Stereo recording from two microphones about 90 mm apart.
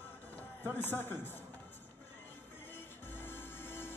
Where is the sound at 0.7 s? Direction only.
20° left (ahead or behind).